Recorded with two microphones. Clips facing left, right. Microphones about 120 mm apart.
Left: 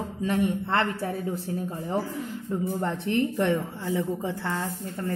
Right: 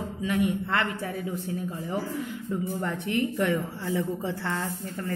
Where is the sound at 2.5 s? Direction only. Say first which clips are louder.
Left 2 dB; 25° left (ahead or behind).